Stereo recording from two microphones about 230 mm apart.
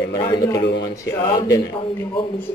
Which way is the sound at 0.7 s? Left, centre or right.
Left.